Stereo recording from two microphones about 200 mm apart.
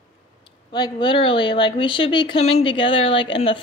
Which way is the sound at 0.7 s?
20° left (ahead or behind).